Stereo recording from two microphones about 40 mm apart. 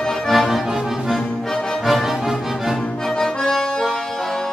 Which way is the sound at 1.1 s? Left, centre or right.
Centre.